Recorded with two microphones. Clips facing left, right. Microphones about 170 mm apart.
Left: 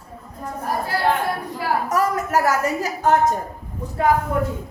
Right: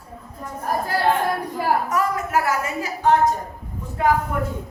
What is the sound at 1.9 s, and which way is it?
A woman's voice, 40° left (ahead or behind).